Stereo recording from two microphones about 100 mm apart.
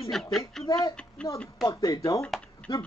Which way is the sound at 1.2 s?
10° left (ahead or behind).